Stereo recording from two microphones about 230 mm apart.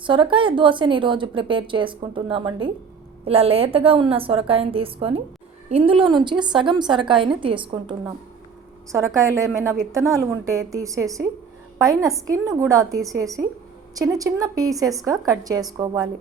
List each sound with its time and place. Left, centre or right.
0.0 s a woman's voice: right